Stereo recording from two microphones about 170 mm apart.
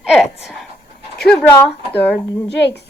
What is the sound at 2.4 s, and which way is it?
Speech, 90° left.